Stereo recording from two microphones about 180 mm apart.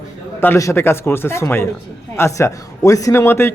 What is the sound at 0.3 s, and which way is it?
A man's voice, 15° left (ahead or behind).